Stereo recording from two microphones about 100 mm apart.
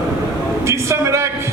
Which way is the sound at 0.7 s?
30° right (ahead or behind).